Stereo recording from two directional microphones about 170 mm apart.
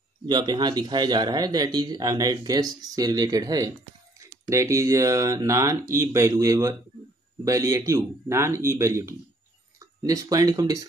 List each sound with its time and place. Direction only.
0.3 s speech: 25° right (ahead or behind)